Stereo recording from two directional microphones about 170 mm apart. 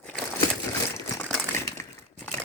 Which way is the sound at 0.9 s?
15° left (ahead or behind).